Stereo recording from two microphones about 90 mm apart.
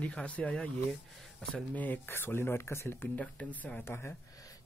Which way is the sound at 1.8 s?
25° left (ahead or behind).